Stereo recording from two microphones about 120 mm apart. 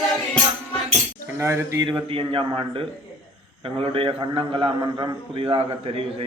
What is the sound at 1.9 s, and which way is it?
A man's voice, 45° right (ahead or behind).